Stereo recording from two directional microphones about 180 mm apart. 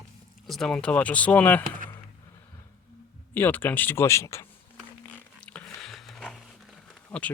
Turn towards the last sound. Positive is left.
turn(degrees=5)  # may be behind; listen again after turning